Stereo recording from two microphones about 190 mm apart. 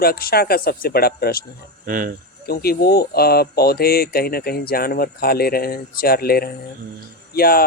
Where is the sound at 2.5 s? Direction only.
55° left (ahead or behind).